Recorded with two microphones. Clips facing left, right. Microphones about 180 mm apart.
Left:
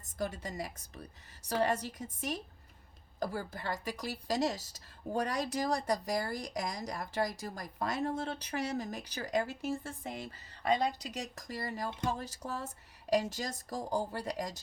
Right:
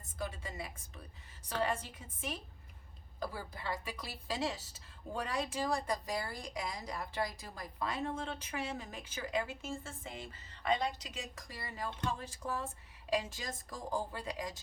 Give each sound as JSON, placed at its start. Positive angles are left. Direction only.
{"t": 0.2, "sound": "a woman's voice", "side_deg": 40}